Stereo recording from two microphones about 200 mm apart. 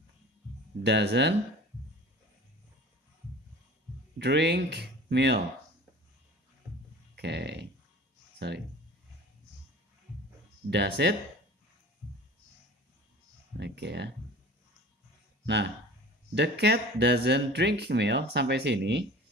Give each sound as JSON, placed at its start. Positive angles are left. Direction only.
{"t": 0.8, "sound": "speech", "side_deg": -55}
{"t": 4.2, "sound": "speech", "side_deg": -55}
{"t": 7.2, "sound": "speech", "side_deg": -55}
{"t": 10.7, "sound": "speech", "side_deg": -60}
{"t": 13.6, "sound": "speech", "side_deg": -55}
{"t": 15.4, "sound": "speech", "side_deg": -60}